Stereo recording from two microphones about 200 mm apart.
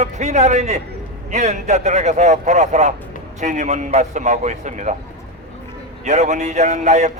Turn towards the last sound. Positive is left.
turn(degrees=-35)  # may be behind; listen again after turning